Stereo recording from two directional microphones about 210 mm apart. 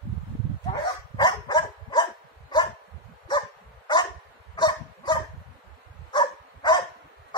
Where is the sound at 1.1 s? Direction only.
20° left (ahead or behind).